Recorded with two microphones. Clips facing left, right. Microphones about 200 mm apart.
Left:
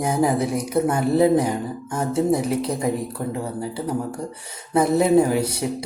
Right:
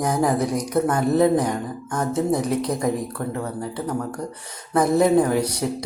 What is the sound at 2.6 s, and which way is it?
Speech, 30° left (ahead or behind).